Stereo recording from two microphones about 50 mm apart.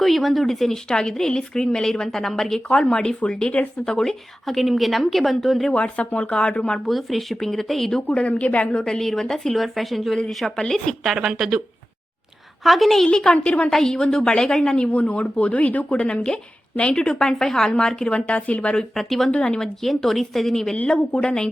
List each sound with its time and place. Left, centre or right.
0.0 s a woman's voice: centre
2.6 s a woman's voice: centre
5.7 s speech: left
6.8 s speech: centre
11.0 s a woman's voice: centre
12.6 s a woman's voice: centre
13.1 s speech: centre
17.2 s speech: centre
18.9 s a woman's voice: centre
19.3 s speech: left
19.5 s a woman's voice: centre
20.8 s speech: centre